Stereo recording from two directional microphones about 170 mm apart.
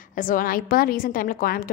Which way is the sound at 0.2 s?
55° left (ahead or behind).